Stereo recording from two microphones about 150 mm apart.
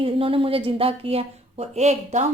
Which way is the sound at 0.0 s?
35° right (ahead or behind).